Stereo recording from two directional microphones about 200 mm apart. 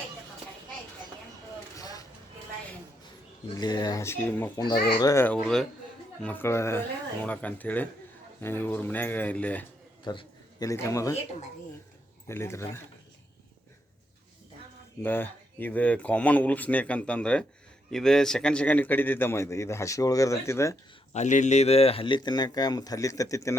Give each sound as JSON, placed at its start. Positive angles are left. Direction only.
{"t": 1.7, "sound": "vehicle", "side_deg": 20}
{"t": 3.6, "sound": "a man's voice", "side_deg": 20}
{"t": 4.5, "sound": "a man's voice", "side_deg": 20}
{"t": 10.0, "sound": "speech", "side_deg": 25}
{"t": 12.3, "sound": "a man's voice", "side_deg": 15}
{"t": 15.0, "sound": "a man's voice", "side_deg": 10}
{"t": 21.1, "sound": "speech", "side_deg": 35}